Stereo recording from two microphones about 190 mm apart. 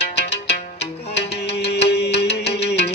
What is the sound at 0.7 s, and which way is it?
Music, 60° left (ahead or behind).